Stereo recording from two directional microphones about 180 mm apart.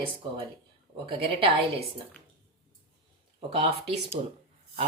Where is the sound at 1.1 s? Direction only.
30° right (ahead or behind).